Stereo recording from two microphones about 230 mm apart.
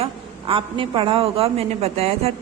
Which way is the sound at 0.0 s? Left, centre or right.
Right.